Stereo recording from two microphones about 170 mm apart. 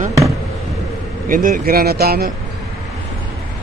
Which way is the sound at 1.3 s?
55° right (ahead or behind).